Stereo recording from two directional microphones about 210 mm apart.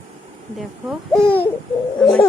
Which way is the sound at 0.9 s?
Centre (ahead or behind).